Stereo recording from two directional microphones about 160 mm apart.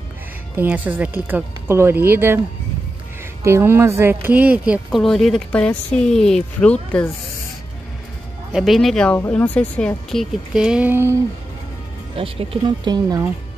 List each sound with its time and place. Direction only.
0.6 s speech: 10° right (ahead or behind)
3.4 s speech: 15° right (ahead or behind); by 7.1 s 5° left (ahead or behind)
8.5 s speech: centre (ahead or behind)
12.2 s speech: 30° right (ahead or behind)